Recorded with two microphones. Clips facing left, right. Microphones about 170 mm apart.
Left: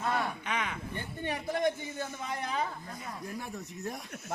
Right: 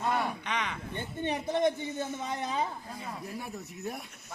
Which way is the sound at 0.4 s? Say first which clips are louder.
Even; 10° left (ahead or behind).